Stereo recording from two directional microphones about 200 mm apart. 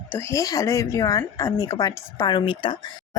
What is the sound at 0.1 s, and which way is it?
Speech, 15° left (ahead or behind).